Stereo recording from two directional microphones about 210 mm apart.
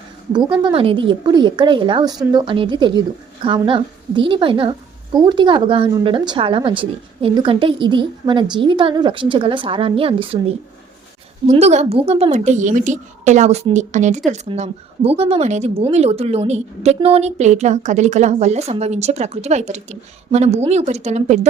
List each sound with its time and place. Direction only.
0.3 s a woman's voice: 20° right (ahead or behind)
11.4 s speech: 30° right (ahead or behind)